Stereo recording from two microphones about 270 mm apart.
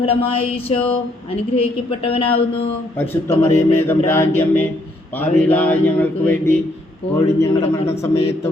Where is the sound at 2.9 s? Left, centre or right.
Centre.